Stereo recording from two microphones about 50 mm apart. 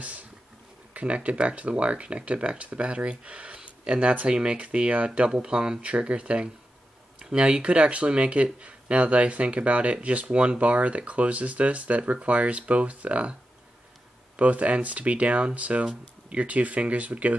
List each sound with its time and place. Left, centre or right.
0.9 s speech: right